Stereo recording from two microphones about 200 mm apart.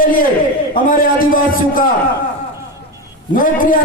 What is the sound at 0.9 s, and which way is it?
Speech, 45° left (ahead or behind).